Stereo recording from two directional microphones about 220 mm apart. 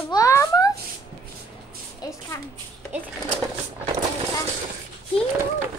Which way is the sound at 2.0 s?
15° left (ahead or behind).